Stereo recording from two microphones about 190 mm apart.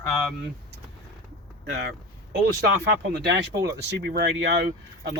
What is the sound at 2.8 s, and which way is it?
Speech, 60° right (ahead or behind).